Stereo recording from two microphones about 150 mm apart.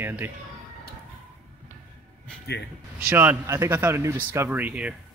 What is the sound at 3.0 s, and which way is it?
Speech, 10° right (ahead or behind).